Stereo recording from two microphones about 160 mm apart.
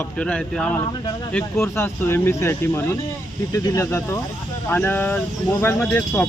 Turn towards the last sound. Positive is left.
turn(degrees=10)  # may be behind; listen again after turning